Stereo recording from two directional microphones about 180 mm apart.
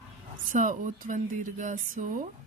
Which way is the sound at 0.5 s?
45° right (ahead or behind).